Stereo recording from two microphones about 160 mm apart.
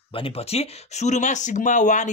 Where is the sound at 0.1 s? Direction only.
35° left (ahead or behind).